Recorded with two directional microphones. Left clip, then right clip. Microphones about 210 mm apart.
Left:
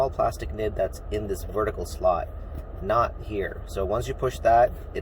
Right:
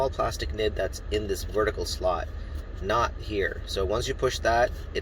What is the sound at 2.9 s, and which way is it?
Speech, 10° left (ahead or behind).